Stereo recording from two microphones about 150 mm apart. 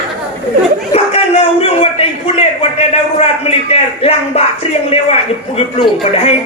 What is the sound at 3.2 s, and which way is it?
A man's voice, 40° left (ahead or behind).